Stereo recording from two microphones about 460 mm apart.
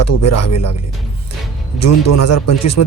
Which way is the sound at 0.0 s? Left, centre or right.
Left.